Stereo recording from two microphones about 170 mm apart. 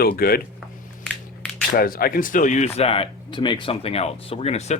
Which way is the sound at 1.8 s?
60° left (ahead or behind).